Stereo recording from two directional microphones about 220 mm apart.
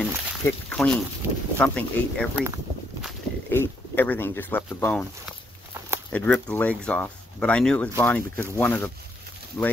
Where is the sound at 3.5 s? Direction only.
10° left (ahead or behind).